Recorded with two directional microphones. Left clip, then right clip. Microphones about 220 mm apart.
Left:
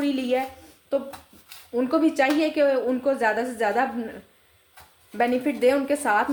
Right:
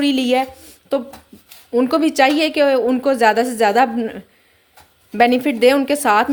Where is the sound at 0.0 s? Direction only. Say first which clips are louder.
Right 8 dB; 45° right (ahead or behind).